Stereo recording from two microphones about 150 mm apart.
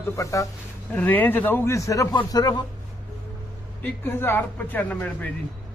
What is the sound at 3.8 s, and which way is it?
A man's voice, 15° left (ahead or behind).